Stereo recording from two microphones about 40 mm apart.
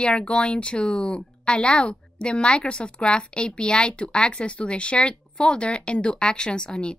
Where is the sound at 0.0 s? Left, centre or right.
Left.